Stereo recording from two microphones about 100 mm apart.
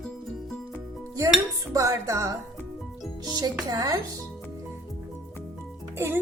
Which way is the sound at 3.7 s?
40° right (ahead or behind).